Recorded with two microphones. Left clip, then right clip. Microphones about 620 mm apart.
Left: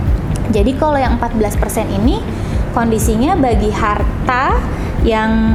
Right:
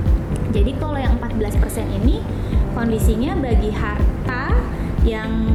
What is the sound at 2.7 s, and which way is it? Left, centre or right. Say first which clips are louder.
A woman's voice: left 7 dB; left.